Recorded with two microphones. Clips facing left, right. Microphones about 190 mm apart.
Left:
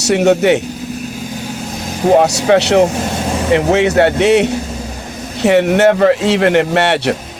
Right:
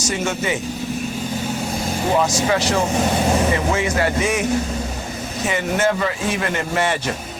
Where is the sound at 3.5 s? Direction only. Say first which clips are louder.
Left 9 dB; 70° left (ahead or behind).